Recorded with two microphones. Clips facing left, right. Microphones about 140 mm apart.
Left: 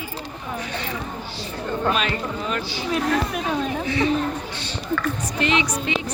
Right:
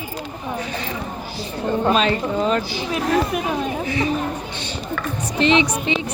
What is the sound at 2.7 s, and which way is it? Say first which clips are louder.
Speech: right 2 dB; 10° right (ahead or behind).